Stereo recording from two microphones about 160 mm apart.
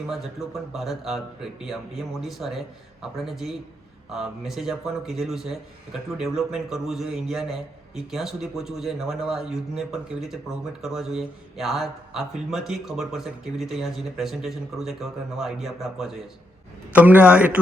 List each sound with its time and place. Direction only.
0.1 s a man's voice: centre (ahead or behind)